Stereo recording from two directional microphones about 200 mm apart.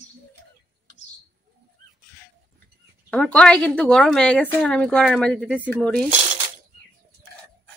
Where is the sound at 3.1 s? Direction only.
5° left (ahead or behind).